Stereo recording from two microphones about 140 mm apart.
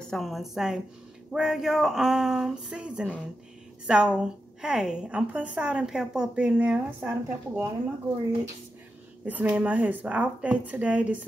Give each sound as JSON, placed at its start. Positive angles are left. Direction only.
{"t": 0.1, "sound": "a woman's voice", "side_deg": 0}
{"t": 9.2, "sound": "a woman's voice", "side_deg": -10}